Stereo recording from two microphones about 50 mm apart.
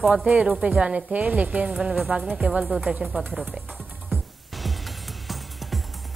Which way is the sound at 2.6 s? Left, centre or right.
Centre.